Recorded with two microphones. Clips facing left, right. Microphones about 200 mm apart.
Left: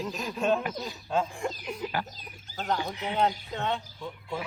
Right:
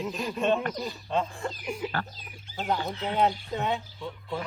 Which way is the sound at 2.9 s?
15° left (ahead or behind).